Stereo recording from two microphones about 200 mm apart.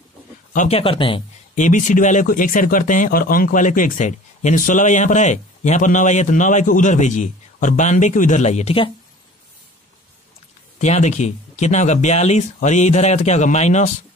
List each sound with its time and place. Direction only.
0.5 s speech: 35° left (ahead or behind)
10.8 s speech: 35° left (ahead or behind)